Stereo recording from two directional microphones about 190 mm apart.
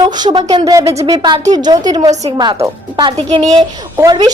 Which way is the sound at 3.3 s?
35° right (ahead or behind).